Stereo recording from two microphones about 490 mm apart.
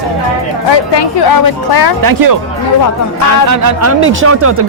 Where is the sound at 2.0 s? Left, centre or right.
Right.